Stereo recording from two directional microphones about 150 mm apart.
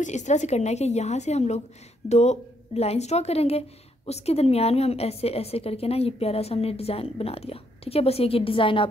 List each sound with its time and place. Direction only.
0.0 s a woman's voice: 50° left (ahead or behind); by 8.8 s 35° left (ahead or behind)